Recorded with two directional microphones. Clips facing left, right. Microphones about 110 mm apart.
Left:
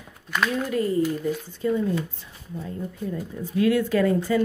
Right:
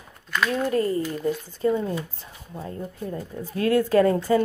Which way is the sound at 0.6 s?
40° right (ahead or behind).